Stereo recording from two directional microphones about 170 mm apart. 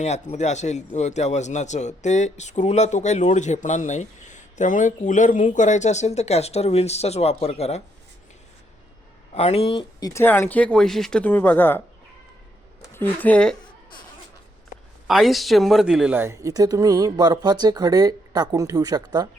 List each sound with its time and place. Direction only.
0.0 s a man's voice: 40° left (ahead or behind)
9.3 s speech: 35° left (ahead or behind)
10.1 s speech: 15° left (ahead or behind)
12.9 s speech: 10° left (ahead or behind)
15.0 s speech: centre (ahead or behind); by 19.3 s 25° right (ahead or behind)